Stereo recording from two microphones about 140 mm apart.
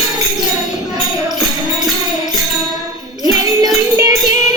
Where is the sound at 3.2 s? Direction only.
25° right (ahead or behind).